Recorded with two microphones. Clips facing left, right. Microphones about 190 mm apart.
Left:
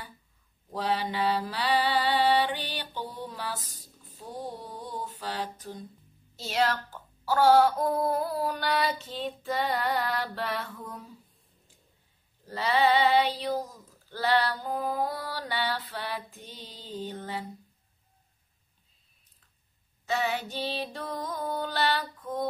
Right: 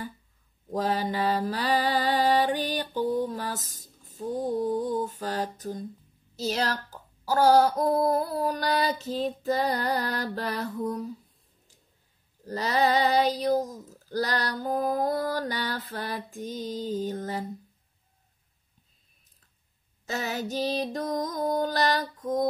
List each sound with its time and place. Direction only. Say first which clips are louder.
0.7 s mantra: right 2 dB; 40° right (ahead or behind)
5.2 s female singing: right 4 dB; 45° right (ahead or behind)
6.3 s speech: even; 40° right (ahead or behind)
12.4 s female singing: even; 40° right (ahead or behind)
20.1 s speech: left 1 dB; 40° right (ahead or behind)